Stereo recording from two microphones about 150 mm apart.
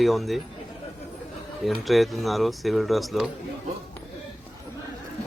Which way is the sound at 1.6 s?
Centre (ahead or behind).